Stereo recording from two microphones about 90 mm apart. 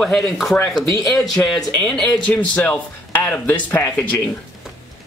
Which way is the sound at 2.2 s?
15° left (ahead or behind).